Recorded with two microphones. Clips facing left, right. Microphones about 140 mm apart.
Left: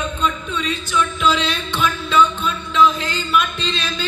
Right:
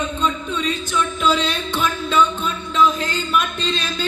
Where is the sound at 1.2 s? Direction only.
45° right (ahead or behind).